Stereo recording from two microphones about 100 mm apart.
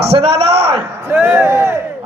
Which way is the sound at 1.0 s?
15° right (ahead or behind).